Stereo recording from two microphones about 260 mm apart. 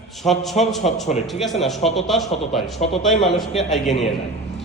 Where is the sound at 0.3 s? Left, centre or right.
Centre.